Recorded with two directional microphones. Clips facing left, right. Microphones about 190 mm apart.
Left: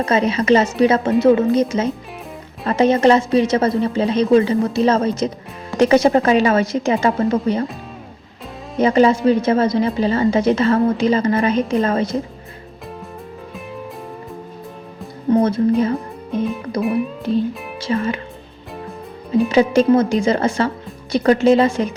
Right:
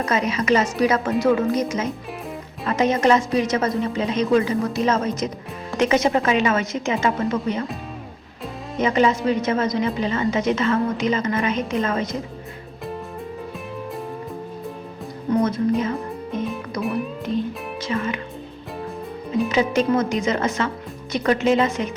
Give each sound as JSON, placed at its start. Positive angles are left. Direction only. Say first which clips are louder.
{"t": 0.0, "sound": "a woman's voice", "louder": "left 5 dB", "side_deg": 30}
{"t": 8.8, "sound": "a woman's voice", "louder": "left 5 dB", "side_deg": 35}
{"t": 15.3, "sound": "a woman's voice", "louder": "left 5 dB", "side_deg": 30}
{"t": 15.8, "sound": "music", "louder": "left 5 dB", "side_deg": 35}
{"t": 17.8, "sound": "a woman's voice", "louder": "left 5 dB", "side_deg": 30}
{"t": 19.5, "sound": "a woman's voice", "louder": "left 7 dB", "side_deg": 30}